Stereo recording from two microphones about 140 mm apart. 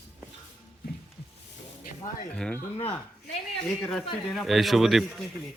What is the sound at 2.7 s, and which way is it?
Speech, 45° left (ahead or behind).